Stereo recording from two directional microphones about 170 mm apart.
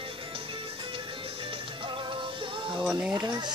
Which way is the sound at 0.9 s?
30° right (ahead or behind).